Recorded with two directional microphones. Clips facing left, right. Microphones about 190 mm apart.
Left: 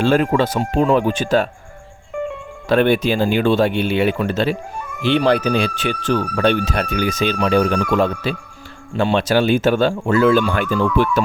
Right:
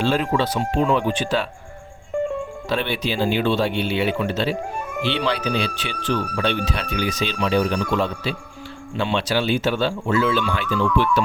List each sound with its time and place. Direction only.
0.0 s speech: 50° left (ahead or behind)
2.6 s speech: 50° left (ahead or behind)